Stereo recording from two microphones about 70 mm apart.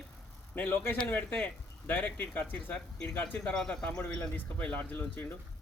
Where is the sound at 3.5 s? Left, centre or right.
Centre.